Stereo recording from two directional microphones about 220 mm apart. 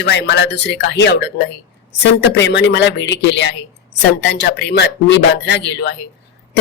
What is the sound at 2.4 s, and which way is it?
Speech, 50° left (ahead or behind).